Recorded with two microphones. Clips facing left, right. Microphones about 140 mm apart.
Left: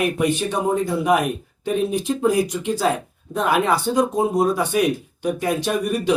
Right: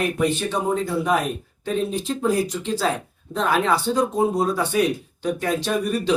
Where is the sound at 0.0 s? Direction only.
15° left (ahead or behind).